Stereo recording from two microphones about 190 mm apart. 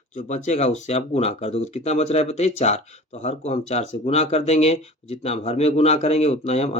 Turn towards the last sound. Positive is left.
turn(degrees=35)  # may be behind; listen again after turning